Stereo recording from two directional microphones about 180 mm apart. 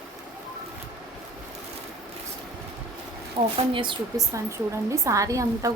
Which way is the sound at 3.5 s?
30° right (ahead or behind).